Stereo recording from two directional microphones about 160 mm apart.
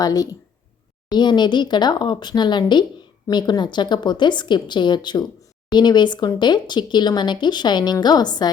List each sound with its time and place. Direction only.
0.0 s speech: 25° left (ahead or behind)